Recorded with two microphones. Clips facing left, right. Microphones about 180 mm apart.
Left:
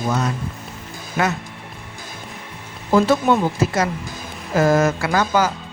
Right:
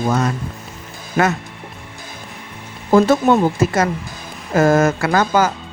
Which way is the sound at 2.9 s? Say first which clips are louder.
Right 3 dB; 45° right (ahead or behind).